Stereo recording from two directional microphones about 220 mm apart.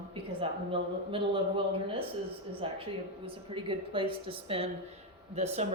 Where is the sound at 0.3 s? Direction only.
25° right (ahead or behind).